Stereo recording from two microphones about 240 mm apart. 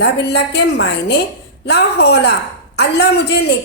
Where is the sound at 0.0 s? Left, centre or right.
Left.